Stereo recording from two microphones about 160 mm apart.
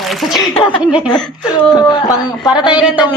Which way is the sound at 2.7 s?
5° right (ahead or behind).